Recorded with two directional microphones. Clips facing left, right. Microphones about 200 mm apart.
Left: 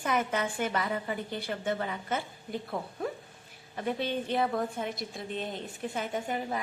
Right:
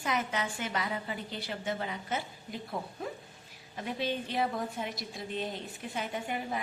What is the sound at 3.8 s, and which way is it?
A woman's voice, 55° left (ahead or behind).